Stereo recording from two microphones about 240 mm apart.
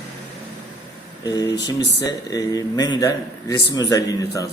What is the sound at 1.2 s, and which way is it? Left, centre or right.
A man's voice, centre.